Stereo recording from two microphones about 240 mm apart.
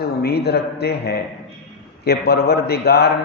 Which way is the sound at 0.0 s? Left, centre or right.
Left.